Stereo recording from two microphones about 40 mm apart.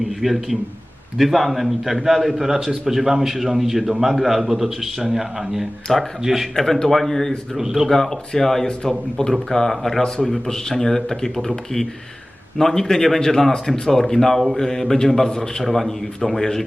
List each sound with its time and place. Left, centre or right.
0.0 s a man's voice: centre
5.9 s speech: centre
6.2 s a man's voice: centre
6.6 s speech: centre
7.5 s a man's voice: centre
7.9 s speech: centre
15.6 s a man's voice: centre